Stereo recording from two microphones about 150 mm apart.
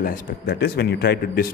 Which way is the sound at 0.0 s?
80° left.